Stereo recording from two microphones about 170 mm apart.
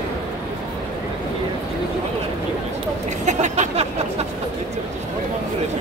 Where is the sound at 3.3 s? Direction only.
45° right (ahead or behind).